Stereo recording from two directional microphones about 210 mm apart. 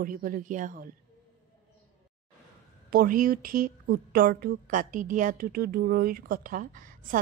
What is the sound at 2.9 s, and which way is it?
A woman's voice, 40° right (ahead or behind).